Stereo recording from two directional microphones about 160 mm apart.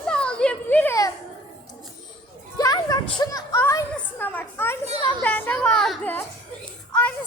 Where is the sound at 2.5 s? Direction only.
25° left (ahead or behind); by 6.1 s 5° left (ahead or behind).